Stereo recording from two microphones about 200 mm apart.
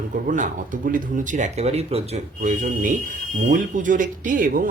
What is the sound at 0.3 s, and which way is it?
Speech, 40° right (ahead or behind).